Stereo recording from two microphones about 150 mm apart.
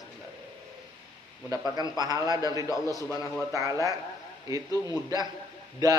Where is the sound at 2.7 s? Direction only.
20° left (ahead or behind).